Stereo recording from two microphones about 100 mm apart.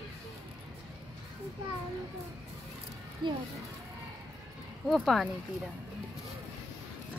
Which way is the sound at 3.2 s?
55° right (ahead or behind).